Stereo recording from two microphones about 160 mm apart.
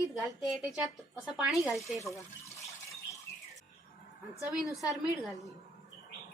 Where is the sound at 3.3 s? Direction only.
15° left (ahead or behind).